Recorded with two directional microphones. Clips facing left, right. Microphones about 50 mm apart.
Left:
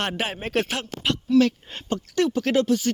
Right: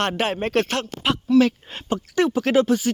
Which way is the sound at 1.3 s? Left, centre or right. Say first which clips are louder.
Right 1 dB; centre.